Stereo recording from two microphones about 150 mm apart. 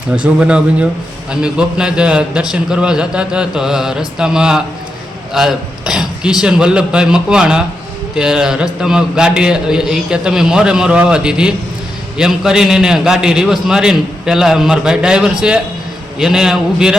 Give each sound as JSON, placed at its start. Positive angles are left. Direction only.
{"t": 0.2, "sound": "a man's voice", "side_deg": -5}